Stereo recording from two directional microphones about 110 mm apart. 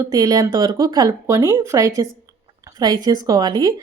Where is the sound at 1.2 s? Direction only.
25° right (ahead or behind).